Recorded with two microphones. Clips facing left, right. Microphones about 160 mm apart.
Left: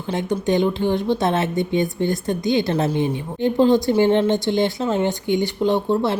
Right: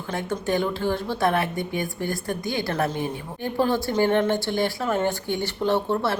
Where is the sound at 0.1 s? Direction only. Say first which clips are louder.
Left 5 dB; 20° left (ahead or behind).